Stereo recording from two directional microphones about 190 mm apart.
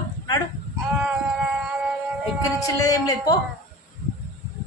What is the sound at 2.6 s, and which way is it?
Speech, 20° left (ahead or behind).